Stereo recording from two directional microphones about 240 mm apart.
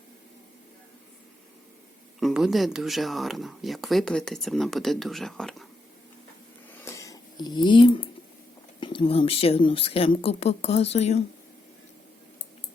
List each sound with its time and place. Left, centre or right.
2.2 s speech: centre
6.8 s a sound: centre
8.8 s a woman's voice: left